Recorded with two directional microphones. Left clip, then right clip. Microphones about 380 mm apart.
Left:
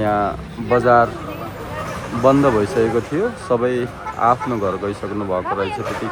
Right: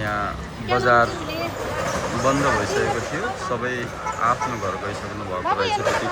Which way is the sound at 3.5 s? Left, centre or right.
Centre.